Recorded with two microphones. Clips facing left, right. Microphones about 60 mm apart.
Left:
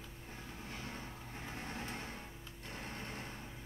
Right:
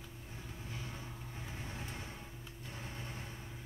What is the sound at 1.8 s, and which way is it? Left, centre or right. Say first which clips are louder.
Music: left 2 dB; left.